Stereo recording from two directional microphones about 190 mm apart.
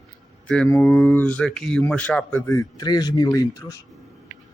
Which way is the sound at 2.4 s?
20° left (ahead or behind).